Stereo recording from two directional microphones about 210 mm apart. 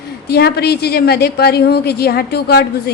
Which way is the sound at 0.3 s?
50° left (ahead or behind).